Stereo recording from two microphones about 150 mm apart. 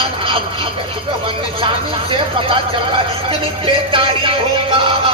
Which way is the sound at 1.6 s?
35° right (ahead or behind).